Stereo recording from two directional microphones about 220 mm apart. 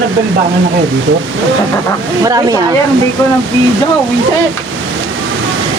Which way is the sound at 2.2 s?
15° right (ahead or behind).